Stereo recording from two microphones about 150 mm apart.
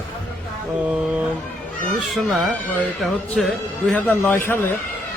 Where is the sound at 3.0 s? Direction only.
Centre (ahead or behind).